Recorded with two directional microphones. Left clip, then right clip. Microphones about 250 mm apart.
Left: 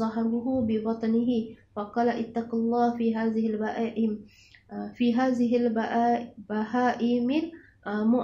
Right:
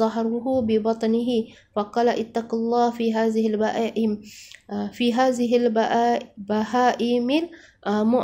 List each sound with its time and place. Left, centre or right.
0.0 s a woman's voice: right